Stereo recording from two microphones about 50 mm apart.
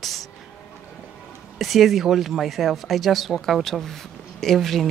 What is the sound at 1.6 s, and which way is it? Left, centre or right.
Speech, centre.